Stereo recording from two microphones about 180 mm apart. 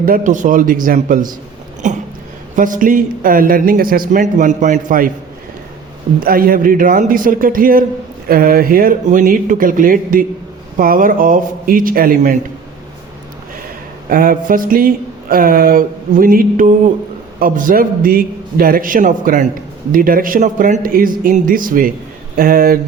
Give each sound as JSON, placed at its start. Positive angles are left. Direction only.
{"t": 0.0, "sound": "speech", "side_deg": -50}
{"t": 6.1, "sound": "speech", "side_deg": -55}
{"t": 14.1, "sound": "speech", "side_deg": -50}